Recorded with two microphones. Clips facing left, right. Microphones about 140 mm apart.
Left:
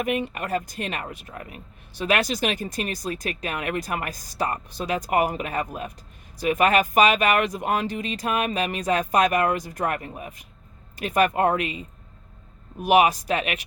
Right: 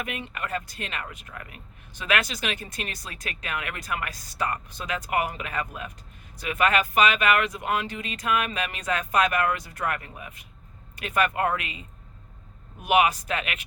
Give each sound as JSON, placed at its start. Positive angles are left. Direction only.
{"t": 0.3, "sound": "speech", "side_deg": 40}
{"t": 1.0, "sound": "speech", "side_deg": 30}